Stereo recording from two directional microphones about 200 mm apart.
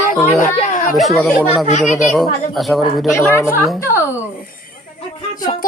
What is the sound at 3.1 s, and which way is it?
Speech, 15° left (ahead or behind).